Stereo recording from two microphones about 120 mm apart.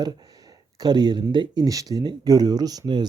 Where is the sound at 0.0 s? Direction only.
35° right (ahead or behind).